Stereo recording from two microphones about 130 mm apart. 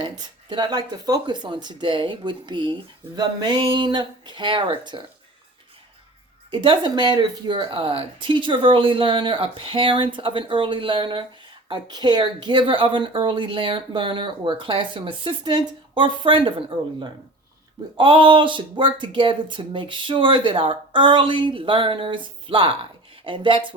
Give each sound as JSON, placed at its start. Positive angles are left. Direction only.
{"t": 0.0, "sound": "speech", "side_deg": -35}
{"t": 6.5, "sound": "speech", "side_deg": -40}